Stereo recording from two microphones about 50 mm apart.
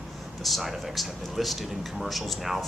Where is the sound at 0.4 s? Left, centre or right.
Centre.